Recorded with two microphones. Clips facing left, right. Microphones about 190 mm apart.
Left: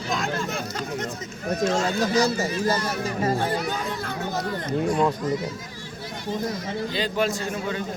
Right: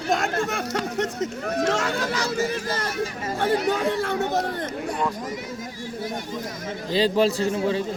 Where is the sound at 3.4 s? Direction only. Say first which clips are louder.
Right 5 dB; 75° right (ahead or behind); by 4.7 s 60° right (ahead or behind).